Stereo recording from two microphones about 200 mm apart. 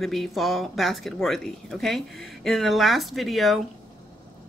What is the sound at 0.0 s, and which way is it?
Speech, centre (ahead or behind).